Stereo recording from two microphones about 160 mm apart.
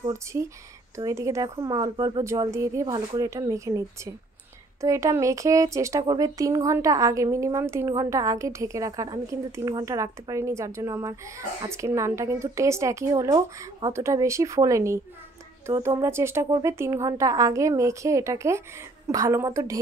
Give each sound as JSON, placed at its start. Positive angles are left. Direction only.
{"t": 0.1, "sound": "speech", "side_deg": -20}